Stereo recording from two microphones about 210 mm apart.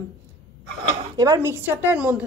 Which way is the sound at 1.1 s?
15° right (ahead or behind).